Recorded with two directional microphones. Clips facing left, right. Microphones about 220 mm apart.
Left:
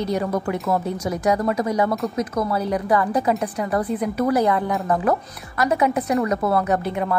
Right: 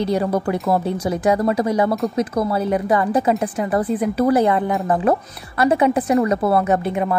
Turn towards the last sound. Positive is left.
turn(degrees=-20)  # may be behind; listen again after turning